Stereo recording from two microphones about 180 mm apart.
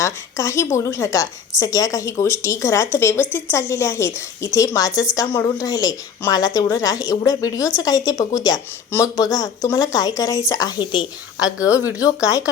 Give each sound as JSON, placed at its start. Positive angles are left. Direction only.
{"t": 0.0, "sound": "a woman's voice", "side_deg": 15}